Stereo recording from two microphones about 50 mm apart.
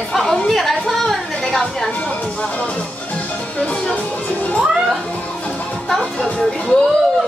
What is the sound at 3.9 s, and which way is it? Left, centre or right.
Music, left.